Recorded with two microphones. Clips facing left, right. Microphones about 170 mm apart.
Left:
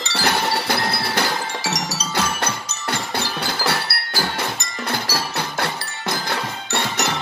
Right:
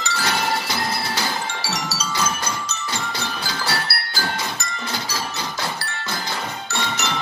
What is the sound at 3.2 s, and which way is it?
Music, 60° left (ahead or behind).